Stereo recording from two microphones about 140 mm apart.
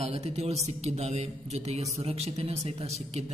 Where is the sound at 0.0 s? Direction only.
50° right (ahead or behind).